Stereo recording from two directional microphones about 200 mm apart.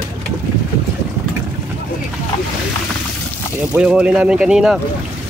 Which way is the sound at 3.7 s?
5° right (ahead or behind).